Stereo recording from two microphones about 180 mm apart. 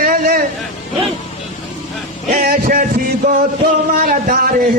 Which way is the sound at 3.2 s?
45° right (ahead or behind).